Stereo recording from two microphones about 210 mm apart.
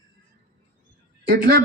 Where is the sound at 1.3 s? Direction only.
45° right (ahead or behind).